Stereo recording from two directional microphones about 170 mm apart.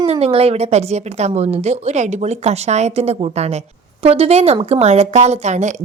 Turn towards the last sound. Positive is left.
turn(degrees=-45)  # may be behind; listen again after turning